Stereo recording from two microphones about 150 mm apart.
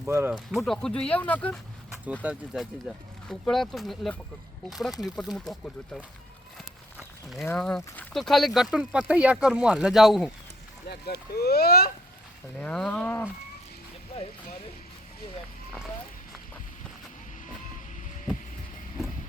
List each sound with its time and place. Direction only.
0.0 s speech: 15° right (ahead or behind)
0.3 s speech: centre (ahead or behind)
2.2 s speech: 10° right (ahead or behind)
6.9 s a sound: centre (ahead or behind)
7.4 s speech: 5° left (ahead or behind)
10.8 s speech: 90° left
12.5 s cattle: 5° left (ahead or behind)